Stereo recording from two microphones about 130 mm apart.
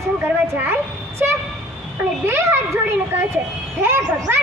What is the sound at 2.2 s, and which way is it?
Speech, 20° right (ahead or behind).